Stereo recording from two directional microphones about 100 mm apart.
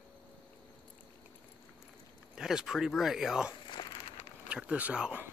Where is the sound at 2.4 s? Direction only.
5° right (ahead or behind).